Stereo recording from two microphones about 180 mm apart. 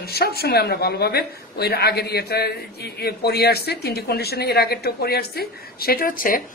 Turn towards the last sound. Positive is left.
turn(degrees=50)  # may be behind; listen again after turning